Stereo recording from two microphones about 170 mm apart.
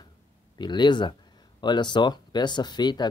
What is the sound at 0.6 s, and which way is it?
Speech, 25° left (ahead or behind).